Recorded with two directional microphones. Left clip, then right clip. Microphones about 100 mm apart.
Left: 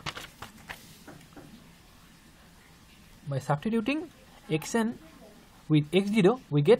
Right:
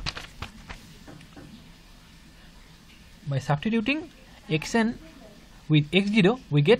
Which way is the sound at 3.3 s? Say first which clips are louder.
Right 2 dB; 10° left (ahead or behind).